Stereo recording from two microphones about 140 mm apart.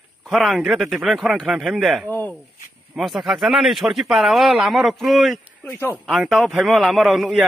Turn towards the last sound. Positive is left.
turn(degrees=0)  # may be behind; listen again after turning